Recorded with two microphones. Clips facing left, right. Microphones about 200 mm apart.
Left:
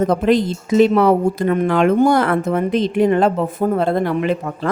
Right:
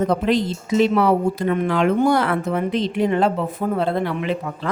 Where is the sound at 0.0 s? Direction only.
45° left (ahead or behind).